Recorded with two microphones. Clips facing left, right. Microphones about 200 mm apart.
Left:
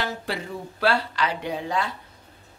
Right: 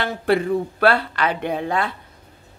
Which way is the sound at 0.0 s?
60° right (ahead or behind).